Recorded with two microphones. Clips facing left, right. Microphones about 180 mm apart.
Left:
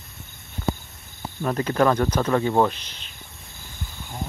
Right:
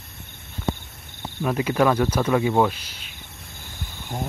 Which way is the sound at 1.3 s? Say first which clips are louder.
Even; 5° right (ahead or behind).